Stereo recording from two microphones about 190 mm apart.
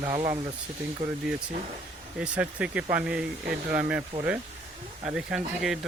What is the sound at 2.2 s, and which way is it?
Speech, 5° right (ahead or behind).